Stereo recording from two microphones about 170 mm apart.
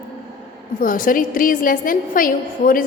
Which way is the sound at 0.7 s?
55° left (ahead or behind).